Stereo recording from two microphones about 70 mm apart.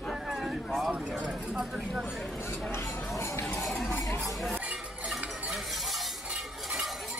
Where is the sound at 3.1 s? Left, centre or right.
Left.